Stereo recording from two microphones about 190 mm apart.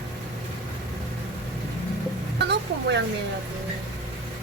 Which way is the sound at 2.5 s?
60° right (ahead or behind).